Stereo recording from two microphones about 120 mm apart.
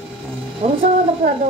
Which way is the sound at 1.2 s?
90° right.